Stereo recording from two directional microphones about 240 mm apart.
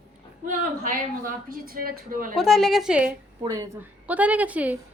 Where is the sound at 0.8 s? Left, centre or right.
Right.